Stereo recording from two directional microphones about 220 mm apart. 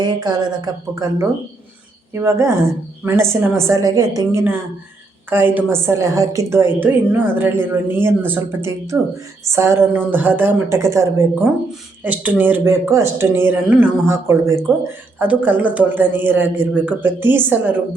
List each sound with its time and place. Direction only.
0.0 s a woman's voice: 20° right (ahead or behind)